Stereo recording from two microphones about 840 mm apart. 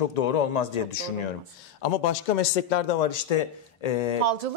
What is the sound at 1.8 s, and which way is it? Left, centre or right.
Speech, left.